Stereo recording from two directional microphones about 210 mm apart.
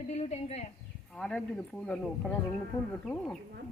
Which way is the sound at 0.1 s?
30° left (ahead or behind).